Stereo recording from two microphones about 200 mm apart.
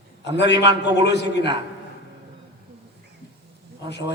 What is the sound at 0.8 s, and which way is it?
Speech, 60° left (ahead or behind).